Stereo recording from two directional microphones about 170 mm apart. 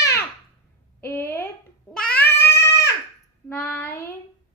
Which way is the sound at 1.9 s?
5° left (ahead or behind).